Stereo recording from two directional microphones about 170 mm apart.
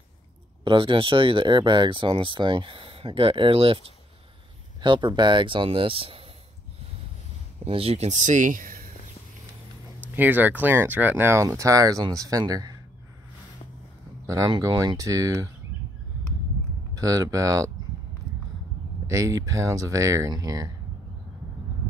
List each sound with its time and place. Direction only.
0.7 s speech: 30° right (ahead or behind)
7.6 s speech: 35° right (ahead or behind); by 8.8 s 55° right (ahead or behind)
10.1 s speech: 10° right (ahead or behind)
14.2 s speech: 20° right (ahead or behind)
16.9 s speech: 20° right (ahead or behind)
19.0 s speech: 20° right (ahead or behind)